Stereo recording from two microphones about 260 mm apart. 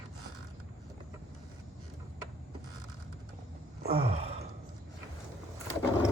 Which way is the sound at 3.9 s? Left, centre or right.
Right.